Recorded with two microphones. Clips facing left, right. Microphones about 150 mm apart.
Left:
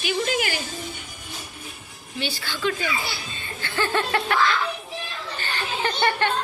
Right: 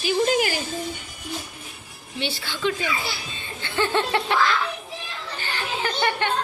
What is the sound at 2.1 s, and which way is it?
Snicker, 25° right (ahead or behind).